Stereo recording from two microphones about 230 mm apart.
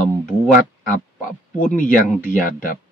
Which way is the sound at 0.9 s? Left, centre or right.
Left.